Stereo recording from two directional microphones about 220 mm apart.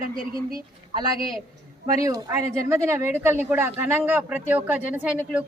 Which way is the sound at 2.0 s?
15° right (ahead or behind).